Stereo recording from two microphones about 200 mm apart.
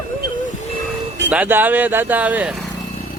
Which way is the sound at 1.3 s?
10° right (ahead or behind).